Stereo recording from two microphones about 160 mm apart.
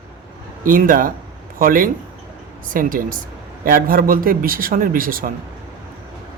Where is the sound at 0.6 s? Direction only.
60° right (ahead or behind).